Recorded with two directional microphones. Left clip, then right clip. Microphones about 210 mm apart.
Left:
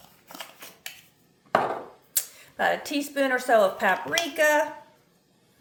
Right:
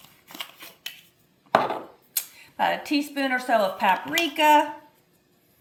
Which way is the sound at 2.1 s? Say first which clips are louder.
Left 3 dB; 25° left (ahead or behind).